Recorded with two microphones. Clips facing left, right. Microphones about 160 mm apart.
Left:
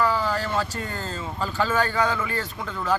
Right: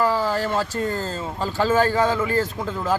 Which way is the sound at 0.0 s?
35° right (ahead or behind).